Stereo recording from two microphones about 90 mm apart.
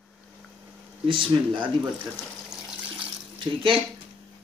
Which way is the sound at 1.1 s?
70° right (ahead or behind).